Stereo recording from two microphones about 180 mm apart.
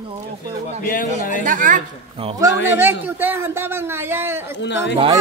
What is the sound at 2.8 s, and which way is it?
A man's voice, 10° right (ahead or behind).